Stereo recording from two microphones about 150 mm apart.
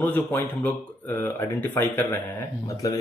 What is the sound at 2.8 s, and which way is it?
Speech, 25° left (ahead or behind).